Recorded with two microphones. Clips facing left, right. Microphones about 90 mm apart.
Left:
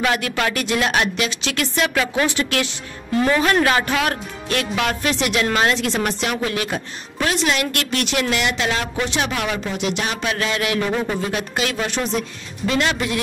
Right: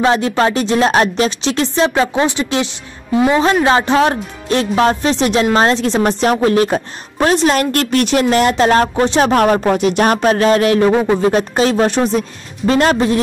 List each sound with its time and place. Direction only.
0.0 s speech: 30° right (ahead or behind)